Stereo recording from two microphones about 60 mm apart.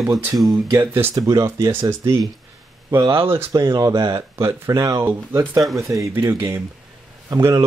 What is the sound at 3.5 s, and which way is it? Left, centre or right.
Speech, right.